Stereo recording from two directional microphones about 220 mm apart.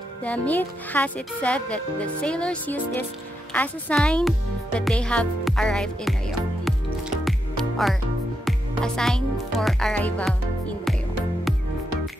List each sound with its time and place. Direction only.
0.2 s speech: 5° left (ahead or behind)
7.2 s music: centre (ahead or behind)
8.5 s speech: 5° left (ahead or behind)